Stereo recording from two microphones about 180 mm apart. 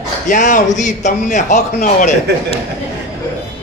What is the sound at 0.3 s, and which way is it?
A man's voice, 45° left (ahead or behind).